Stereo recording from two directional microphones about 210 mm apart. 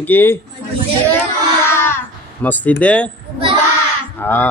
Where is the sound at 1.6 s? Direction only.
10° left (ahead or behind).